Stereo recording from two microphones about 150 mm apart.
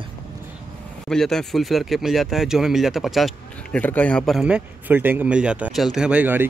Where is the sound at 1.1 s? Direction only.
5° left (ahead or behind).